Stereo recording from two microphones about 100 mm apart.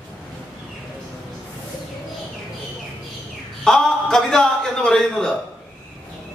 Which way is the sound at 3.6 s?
5° left (ahead or behind).